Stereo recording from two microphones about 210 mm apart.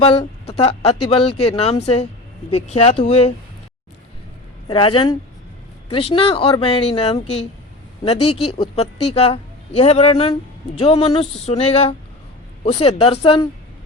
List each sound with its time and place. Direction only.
0.0 s speech: 25° left (ahead or behind)
4.7 s speech: 25° left (ahead or behind)
8.5 s speech: 25° left (ahead or behind)